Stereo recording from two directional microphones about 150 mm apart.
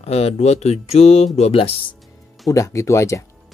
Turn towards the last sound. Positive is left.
turn(degrees=20)  # may be behind; listen again after turning